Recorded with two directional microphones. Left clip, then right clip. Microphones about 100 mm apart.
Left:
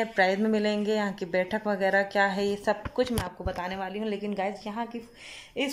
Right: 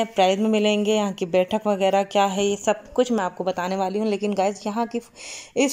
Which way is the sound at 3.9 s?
30° right (ahead or behind).